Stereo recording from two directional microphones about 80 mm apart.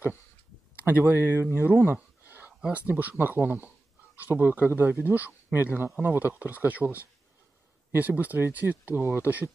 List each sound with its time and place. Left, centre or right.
0.7 s speech: right